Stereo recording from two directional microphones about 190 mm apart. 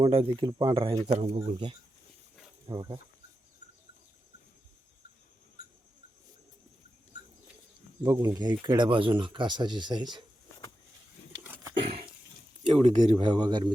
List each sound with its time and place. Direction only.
0.0 s speech: 30° right (ahead or behind)
8.0 s speech: 15° right (ahead or behind)
11.4 s a sound: 10° right (ahead or behind)
11.7 s a sound: 30° right (ahead or behind)
12.7 s speech: 40° right (ahead or behind)
13.1 s speech: 25° right (ahead or behind)